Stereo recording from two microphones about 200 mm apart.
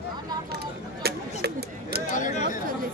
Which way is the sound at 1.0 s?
55° right (ahead or behind).